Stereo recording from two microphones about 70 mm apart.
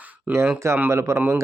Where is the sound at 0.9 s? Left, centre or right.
Right.